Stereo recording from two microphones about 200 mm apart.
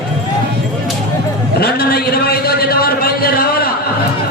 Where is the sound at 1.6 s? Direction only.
50° left (ahead or behind).